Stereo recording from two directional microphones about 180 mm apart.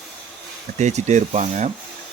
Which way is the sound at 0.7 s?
40° right (ahead or behind).